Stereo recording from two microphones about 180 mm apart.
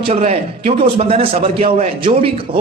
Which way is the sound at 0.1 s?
35° right (ahead or behind).